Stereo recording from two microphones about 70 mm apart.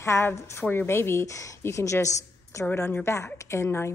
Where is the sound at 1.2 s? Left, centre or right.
Left.